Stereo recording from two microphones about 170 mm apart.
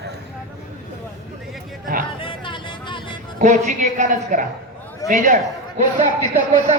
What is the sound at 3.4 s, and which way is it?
A man's voice, 45° right (ahead or behind).